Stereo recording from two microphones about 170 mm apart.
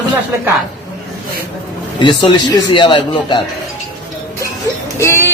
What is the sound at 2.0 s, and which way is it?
A woman's voice, 25° left (ahead or behind).